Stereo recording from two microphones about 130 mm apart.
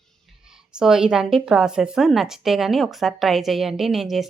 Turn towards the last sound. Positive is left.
turn(degrees=0)  # may be behind; listen again after turning